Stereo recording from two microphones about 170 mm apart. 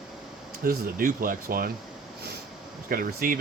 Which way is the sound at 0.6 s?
60° right (ahead or behind).